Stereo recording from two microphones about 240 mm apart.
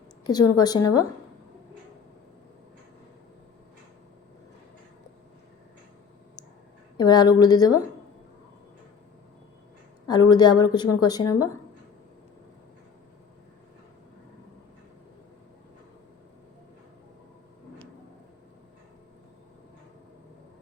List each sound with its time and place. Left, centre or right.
0.3 s a woman's voice: centre
6.9 s a woman's voice: centre
10.1 s a woman's voice: centre